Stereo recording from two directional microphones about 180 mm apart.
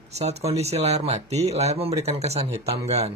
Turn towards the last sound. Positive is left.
turn(degrees=-35)  # may be behind; listen again after turning